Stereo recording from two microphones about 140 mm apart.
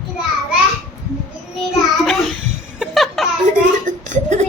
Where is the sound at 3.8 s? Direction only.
60° right (ahead or behind).